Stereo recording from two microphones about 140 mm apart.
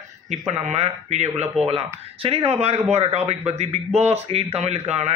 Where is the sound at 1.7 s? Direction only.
45° right (ahead or behind).